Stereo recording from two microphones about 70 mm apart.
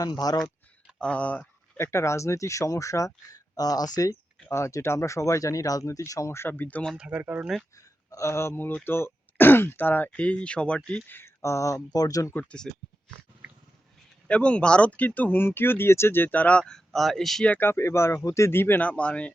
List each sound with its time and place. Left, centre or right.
0.0 s speech: left
0.9 s a sound: centre
1.8 s speech: left
4.4 s speech: left
6.3 s speech: left
7.1 s speech: right
8.1 s speech: left; by 11.0 s centre
11.4 s speech: left
11.9 s speech: left
12.3 s speech: left
14.3 s speech: centre
17.6 s speech: left
18.9 s speech: centre